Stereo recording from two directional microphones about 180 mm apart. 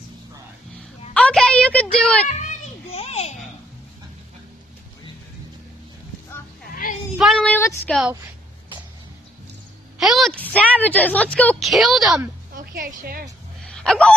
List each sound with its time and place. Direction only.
1.1 s a sound: 5° left (ahead or behind)
2.2 s children playing: 45° left (ahead or behind)
6.7 s child singing: 50° left (ahead or behind)
7.2 s child singing: centre (ahead or behind)
9.9 s a woman's voice: centre (ahead or behind)
12.5 s a woman's voice: 50° right (ahead or behind)
13.7 s a sound: 5° left (ahead or behind)